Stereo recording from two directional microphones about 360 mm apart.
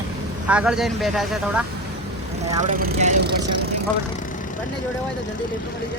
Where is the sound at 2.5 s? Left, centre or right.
Right.